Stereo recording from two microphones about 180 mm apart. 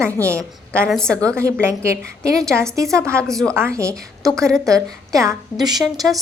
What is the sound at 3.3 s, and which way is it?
Speech, centre (ahead or behind).